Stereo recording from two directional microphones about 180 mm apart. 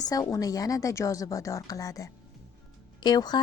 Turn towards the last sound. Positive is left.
turn(degrees=25)  # may be behind; listen again after turning